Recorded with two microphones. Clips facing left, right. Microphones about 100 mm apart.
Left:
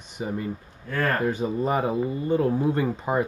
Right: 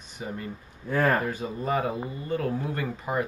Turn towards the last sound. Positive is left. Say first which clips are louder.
# left 5 dB
turn(degrees=25)  # may be behind; listen again after turning